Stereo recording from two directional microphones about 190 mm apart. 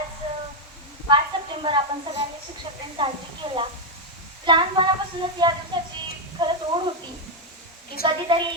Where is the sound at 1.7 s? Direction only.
25° right (ahead or behind).